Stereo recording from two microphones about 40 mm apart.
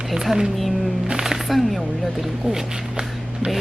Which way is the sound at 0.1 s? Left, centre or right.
Centre.